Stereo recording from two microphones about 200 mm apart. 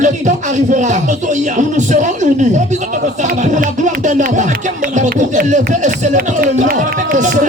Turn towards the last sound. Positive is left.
turn(degrees=-40)  # may be behind; listen again after turning